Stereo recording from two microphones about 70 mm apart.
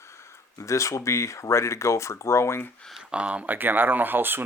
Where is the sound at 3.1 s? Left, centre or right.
Centre.